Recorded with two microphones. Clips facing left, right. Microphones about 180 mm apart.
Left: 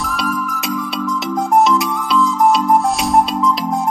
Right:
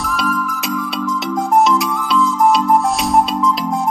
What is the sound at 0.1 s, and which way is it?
Music, centre (ahead or behind).